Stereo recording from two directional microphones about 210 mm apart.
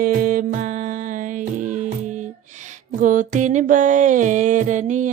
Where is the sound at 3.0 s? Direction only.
40° right (ahead or behind).